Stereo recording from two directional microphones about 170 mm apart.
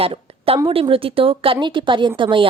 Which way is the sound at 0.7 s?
35° right (ahead or behind).